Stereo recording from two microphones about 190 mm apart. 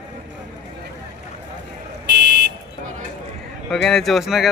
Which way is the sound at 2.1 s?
65° right (ahead or behind).